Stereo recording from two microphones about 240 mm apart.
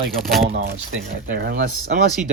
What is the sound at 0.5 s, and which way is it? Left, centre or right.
Speech, right.